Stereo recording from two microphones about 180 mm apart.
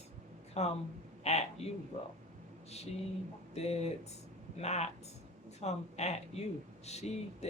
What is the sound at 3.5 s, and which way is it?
Speech, 35° left (ahead or behind).